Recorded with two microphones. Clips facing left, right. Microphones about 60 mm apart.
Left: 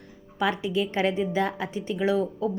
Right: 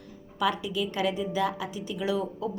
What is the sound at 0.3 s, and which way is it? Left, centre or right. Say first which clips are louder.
A woman's voice: left 2 dB; left.